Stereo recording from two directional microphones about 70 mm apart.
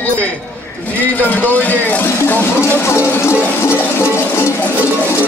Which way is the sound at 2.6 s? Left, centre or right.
Left.